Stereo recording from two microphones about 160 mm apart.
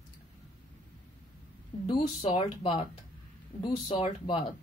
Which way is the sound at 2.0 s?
40° left (ahead or behind).